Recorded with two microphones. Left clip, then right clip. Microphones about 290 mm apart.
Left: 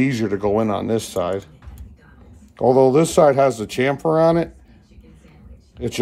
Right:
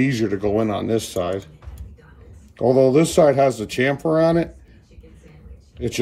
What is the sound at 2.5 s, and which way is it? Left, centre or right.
Speech, centre.